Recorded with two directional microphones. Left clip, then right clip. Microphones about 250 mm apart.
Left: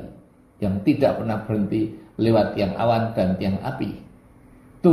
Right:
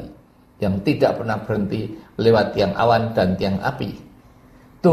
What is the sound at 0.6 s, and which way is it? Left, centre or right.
Speech, right.